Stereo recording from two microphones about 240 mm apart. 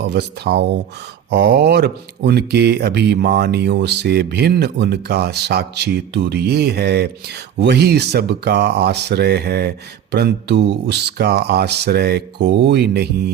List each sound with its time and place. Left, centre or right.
0.0 s speech: right